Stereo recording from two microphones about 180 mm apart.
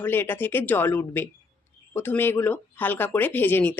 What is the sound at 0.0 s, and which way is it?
Speech, 10° left (ahead or behind).